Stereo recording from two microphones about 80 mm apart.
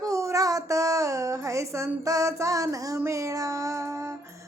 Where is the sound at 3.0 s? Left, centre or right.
Right.